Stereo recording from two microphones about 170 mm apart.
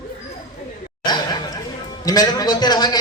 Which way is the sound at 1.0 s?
25° left (ahead or behind).